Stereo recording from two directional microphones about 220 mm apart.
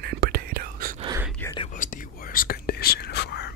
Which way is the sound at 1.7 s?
35° left (ahead or behind).